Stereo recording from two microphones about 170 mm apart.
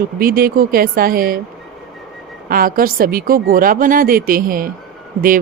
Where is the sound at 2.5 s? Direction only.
55° right (ahead or behind).